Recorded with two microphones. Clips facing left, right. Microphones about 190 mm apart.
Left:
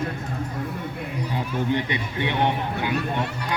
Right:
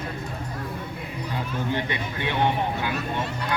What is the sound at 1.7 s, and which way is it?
Speech, 20° left (ahead or behind).